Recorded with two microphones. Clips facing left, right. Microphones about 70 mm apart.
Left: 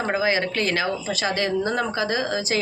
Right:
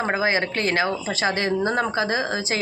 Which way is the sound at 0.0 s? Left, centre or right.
Right.